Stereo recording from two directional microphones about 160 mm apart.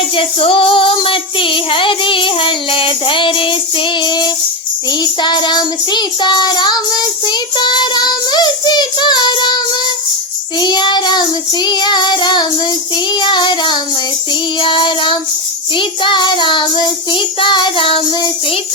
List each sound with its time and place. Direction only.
0.2 s child singing: 35° left (ahead or behind)
10.6 s child singing: 25° left (ahead or behind)